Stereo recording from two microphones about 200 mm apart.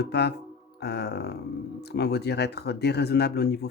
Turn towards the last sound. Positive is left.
turn(degrees=55)  # may be behind; listen again after turning